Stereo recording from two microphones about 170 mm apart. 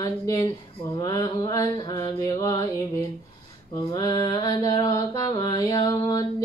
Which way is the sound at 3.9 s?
20° left (ahead or behind).